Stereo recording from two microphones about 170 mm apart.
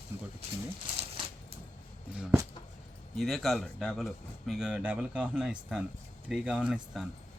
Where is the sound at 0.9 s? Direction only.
35° right (ahead or behind).